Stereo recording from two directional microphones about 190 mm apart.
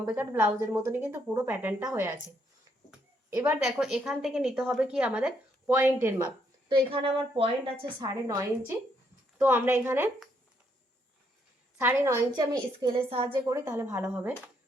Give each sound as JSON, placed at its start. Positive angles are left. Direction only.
{"t": 0.0, "sound": "a woman's voice", "side_deg": -15}
{"t": 3.2, "sound": "speech", "side_deg": -15}
{"t": 3.6, "sound": "a woman's voice", "side_deg": 0}
{"t": 6.7, "sound": "a woman's voice", "side_deg": -30}
{"t": 8.0, "sound": "a woman's voice", "side_deg": -15}
{"t": 11.8, "sound": "a woman's voice", "side_deg": -10}
{"t": 13.3, "sound": "a woman's voice", "side_deg": -15}